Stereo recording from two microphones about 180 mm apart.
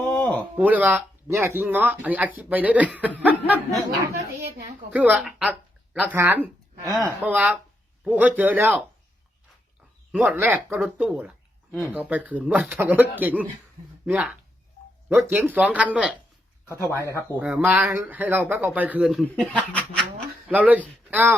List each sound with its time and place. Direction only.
0.0 s a sound: 10° left (ahead or behind)
0.5 s speech: 10° right (ahead or behind)
10.1 s speech: 5° right (ahead or behind)
14.8 s a sound: 45° left (ahead or behind)
15.1 s speech: 10° right (ahead or behind)
19.2 s speech: 5° left (ahead or behind)
20.5 s speech: 10° right (ahead or behind)